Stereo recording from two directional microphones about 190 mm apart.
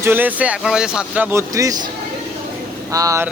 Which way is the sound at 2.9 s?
15° right (ahead or behind).